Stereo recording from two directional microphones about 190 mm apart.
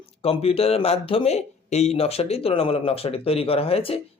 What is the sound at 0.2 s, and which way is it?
Speech, 30° left (ahead or behind).